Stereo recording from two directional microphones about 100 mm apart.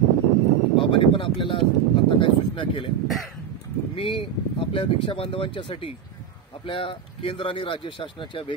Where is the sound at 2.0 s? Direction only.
60° left (ahead or behind).